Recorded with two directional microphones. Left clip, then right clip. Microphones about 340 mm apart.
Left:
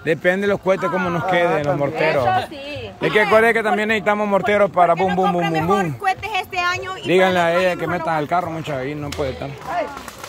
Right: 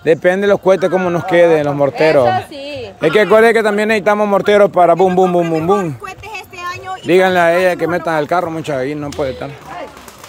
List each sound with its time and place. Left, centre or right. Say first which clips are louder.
0.0 s a man's voice: right 6 dB; centre
6.0 s a sound: left 7 dB; centre
7.1 s a man's voice: right 5 dB; centre